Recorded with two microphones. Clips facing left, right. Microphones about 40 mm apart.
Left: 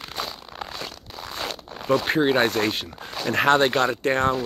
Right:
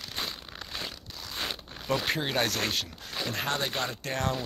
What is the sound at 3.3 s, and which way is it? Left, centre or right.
Speech, left.